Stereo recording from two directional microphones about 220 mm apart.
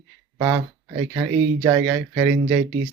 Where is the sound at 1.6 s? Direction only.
15° right (ahead or behind).